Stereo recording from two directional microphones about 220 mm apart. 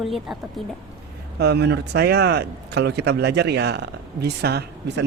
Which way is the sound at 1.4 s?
50° right (ahead or behind).